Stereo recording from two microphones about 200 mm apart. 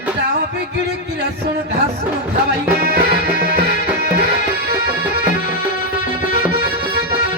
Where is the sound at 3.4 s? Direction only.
55° right (ahead or behind).